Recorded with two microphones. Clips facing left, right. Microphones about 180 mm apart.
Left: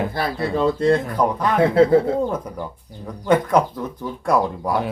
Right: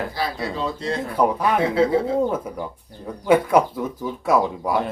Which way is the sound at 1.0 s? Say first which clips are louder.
Even; 10° right (ahead or behind).